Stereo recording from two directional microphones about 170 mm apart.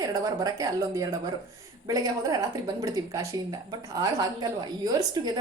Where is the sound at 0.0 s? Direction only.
20° right (ahead or behind).